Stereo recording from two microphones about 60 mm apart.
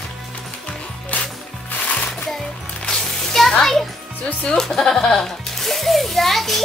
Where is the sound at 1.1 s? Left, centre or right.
Left.